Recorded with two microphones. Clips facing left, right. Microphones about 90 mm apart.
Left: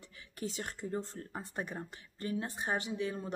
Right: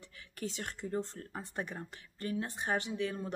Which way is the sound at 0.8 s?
20° left (ahead or behind).